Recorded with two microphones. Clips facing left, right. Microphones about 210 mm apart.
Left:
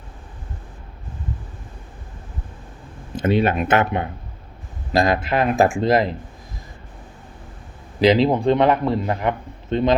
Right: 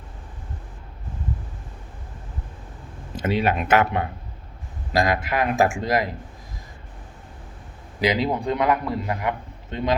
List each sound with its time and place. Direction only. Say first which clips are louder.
3.2 s speech: left 4 dB; 25° left (ahead or behind)
8.0 s speech: left 7 dB; 30° left (ahead or behind)